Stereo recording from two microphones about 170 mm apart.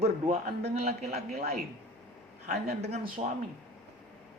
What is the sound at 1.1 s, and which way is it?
Speech, 65° right (ahead or behind).